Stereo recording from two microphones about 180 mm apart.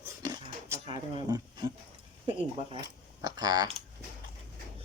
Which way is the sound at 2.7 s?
20° right (ahead or behind).